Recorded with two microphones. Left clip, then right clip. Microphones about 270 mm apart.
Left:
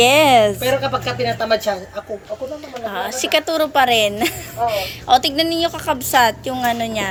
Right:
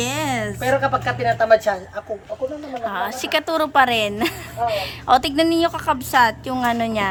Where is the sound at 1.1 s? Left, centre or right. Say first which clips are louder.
Right 4 dB; centre.